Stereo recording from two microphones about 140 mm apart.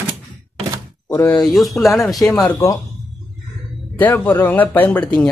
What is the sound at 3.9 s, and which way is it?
Speech, 15° left (ahead or behind).